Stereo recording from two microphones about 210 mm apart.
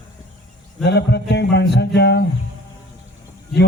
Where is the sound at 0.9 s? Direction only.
55° left (ahead or behind).